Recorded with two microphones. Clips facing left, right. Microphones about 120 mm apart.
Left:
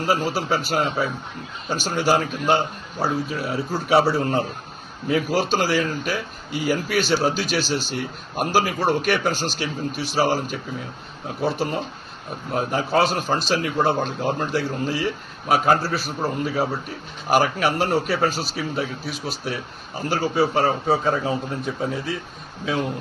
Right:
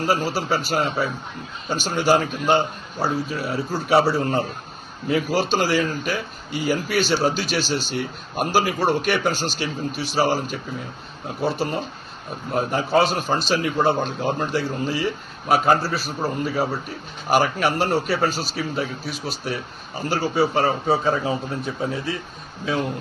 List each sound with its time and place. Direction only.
0.0 s a man's voice: 5° right (ahead or behind)
5.0 s a man's voice: 5° right (ahead or behind)